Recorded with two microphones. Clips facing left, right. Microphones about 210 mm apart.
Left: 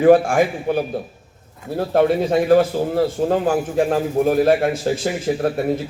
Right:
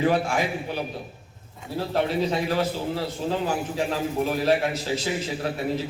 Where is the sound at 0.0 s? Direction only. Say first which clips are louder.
Left 10 dB; 50° left (ahead or behind).